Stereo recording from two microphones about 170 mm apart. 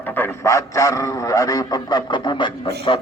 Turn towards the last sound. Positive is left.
turn(degrees=30)  # may be behind; listen again after turning